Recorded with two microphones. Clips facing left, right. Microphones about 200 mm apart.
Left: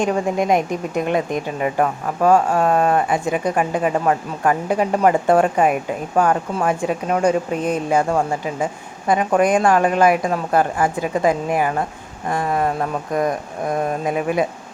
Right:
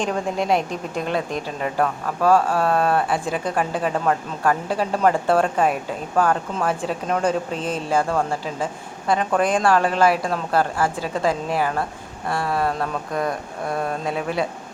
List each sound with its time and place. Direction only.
0.0 s speech: 10° left (ahead or behind)